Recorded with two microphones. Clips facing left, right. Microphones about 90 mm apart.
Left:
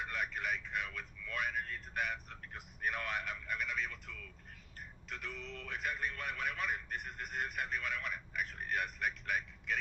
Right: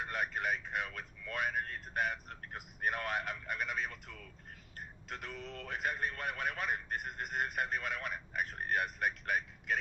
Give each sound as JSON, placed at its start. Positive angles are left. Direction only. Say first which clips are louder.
{"t": 0.0, "sound": "vehicle", "louder": "right 3 dB", "side_deg": -45}
{"t": 5.0, "sound": "a man's voice", "louder": "right 1 dB", "side_deg": -40}